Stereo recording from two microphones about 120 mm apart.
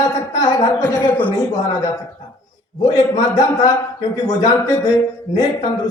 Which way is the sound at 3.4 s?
35° left (ahead or behind).